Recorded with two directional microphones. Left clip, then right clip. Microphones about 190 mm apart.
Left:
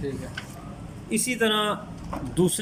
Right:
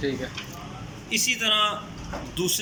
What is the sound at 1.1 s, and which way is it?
Speech, 55° left (ahead or behind).